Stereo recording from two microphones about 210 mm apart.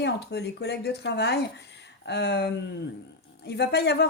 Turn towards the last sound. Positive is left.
turn(degrees=50)  # may be behind; listen again after turning